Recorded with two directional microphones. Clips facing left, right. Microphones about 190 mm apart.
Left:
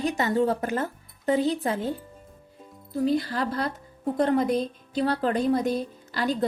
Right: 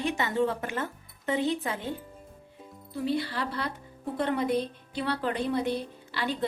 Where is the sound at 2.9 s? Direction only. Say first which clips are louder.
Left 5 dB; 45° left (ahead or behind).